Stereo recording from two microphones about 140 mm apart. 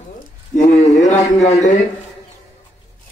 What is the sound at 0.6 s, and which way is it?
A man's voice, 60° left (ahead or behind).